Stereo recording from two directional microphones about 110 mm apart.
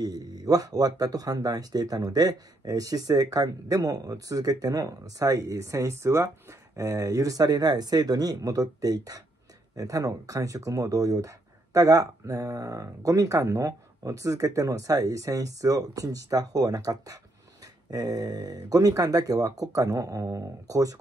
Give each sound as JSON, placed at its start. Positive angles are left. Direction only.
{"t": 0.0, "sound": "speech", "side_deg": -35}